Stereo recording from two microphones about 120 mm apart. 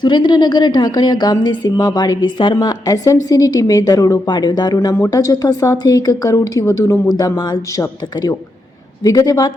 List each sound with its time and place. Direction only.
0.0 s a woman's voice: 40° left (ahead or behind)